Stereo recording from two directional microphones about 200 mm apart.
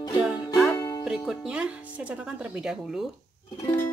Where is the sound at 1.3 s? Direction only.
5° right (ahead or behind).